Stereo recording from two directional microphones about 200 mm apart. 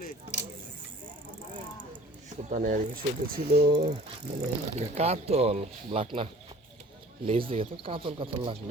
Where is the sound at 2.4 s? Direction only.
40° right (ahead or behind).